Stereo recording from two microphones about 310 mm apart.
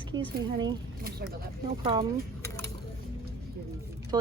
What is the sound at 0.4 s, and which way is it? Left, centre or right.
Speech, centre.